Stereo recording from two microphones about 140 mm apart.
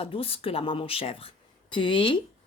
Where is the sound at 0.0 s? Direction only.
40° left (ahead or behind).